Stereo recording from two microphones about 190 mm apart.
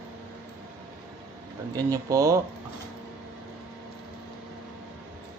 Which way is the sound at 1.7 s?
15° right (ahead or behind).